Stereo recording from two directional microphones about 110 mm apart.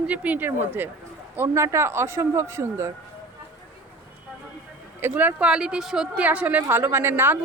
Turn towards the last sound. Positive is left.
turn(degrees=-20)  # may be behind; listen again after turning